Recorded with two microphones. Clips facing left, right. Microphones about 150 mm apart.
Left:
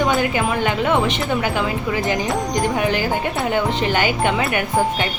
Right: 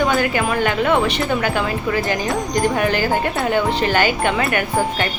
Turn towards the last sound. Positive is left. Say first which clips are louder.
# even
turn(degrees=15)  # may be behind; listen again after turning